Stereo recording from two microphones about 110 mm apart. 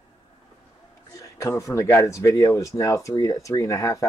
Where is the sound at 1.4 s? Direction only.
25° left (ahead or behind).